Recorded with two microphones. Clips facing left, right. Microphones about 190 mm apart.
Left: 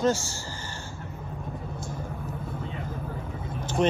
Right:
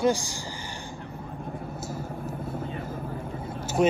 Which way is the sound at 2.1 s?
50° right (ahead or behind).